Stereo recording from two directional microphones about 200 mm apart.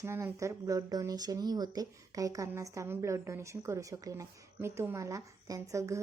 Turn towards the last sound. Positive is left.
turn(degrees=-15)  # may be behind; listen again after turning